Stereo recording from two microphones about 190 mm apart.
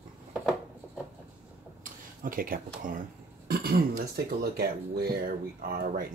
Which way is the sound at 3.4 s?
55° right (ahead or behind).